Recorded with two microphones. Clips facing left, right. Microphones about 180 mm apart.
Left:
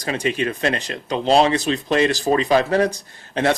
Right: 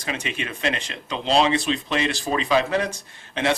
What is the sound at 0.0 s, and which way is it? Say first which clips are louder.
Speech: left 8 dB; 40° left (ahead or behind).